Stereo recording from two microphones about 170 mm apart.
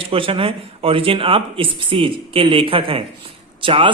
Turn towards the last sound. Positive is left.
turn(degrees=-30)  # may be behind; listen again after turning